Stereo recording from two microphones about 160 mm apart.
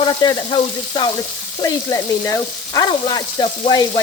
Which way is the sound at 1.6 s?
20° left (ahead or behind).